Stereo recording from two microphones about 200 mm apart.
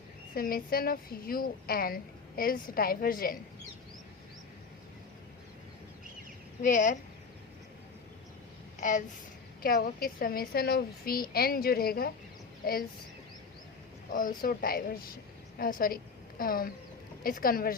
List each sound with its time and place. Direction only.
0.3 s a woman's voice: 45° left (ahead or behind)
6.6 s speech: 40° left (ahead or behind)
8.8 s a sound: 40° left (ahead or behind)
9.6 s a woman's voice: 45° left (ahead or behind)
14.1 s a woman's voice: 45° left (ahead or behind)